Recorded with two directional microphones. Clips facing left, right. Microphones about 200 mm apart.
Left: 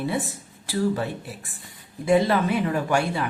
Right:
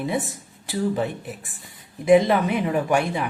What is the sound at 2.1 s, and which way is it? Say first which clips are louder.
A woman's voice: right 3 dB; 20° right (ahead or behind).